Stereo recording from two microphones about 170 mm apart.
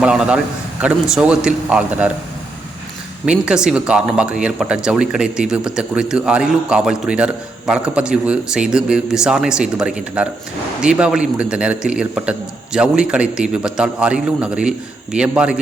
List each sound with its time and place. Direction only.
0.0 s a man's voice: 5° right (ahead or behind)
3.2 s a man's voice: 5° right (ahead or behind)